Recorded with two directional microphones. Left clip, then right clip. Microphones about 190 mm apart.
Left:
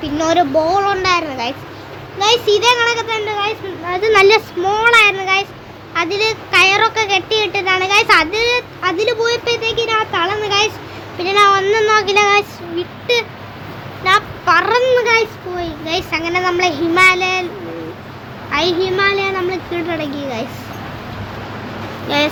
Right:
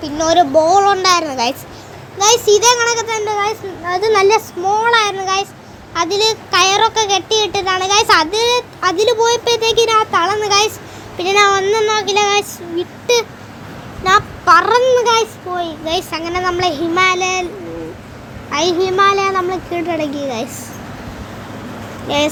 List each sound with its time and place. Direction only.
0.0 s speech: 15° right (ahead or behind); by 1.5 s 30° right (ahead or behind)
2.1 s a child's voice: 20° right (ahead or behind)
4.1 s a child's voice: 5° left (ahead or behind); by 11.6 s 20° right (ahead or behind)
11.6 s a child's voice: centre (ahead or behind)
12.7 s a child's voice: 30° right (ahead or behind)
18.5 s a child's voice: 15° right (ahead or behind)
22.1 s a child's voice: 10° right (ahead or behind)